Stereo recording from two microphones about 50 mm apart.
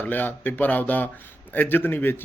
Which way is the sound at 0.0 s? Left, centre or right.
Left.